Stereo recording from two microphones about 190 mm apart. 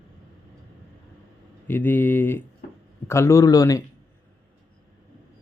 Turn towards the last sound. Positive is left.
turn(degrees=20)  # may be behind; listen again after turning